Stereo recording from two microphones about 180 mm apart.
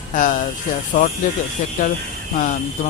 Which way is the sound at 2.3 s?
45° left (ahead or behind).